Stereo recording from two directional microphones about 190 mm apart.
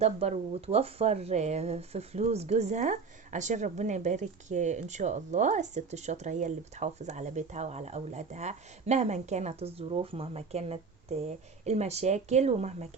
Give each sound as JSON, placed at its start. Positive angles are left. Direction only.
{"t": 0.0, "sound": "speech", "side_deg": -35}